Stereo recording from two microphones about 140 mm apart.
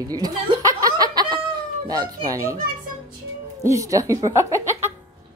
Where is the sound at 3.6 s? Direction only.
20° right (ahead or behind).